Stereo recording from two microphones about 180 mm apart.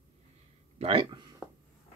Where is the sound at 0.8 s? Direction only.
30° right (ahead or behind).